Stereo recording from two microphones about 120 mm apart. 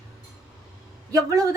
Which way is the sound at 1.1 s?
30° right (ahead or behind).